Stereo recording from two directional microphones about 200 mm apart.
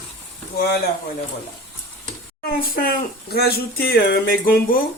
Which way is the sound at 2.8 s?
50° left (ahead or behind).